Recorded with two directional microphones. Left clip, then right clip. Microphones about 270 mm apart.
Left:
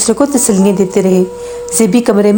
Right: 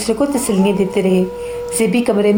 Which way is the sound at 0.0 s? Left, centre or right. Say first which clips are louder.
Left 5 dB; left.